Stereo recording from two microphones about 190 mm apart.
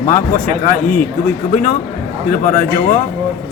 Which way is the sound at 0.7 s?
45° left (ahead or behind).